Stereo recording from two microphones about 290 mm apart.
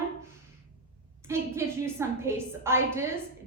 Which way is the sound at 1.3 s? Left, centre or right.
Centre.